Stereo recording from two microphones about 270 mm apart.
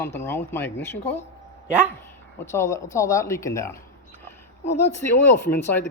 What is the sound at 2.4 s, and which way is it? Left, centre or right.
Speech, centre.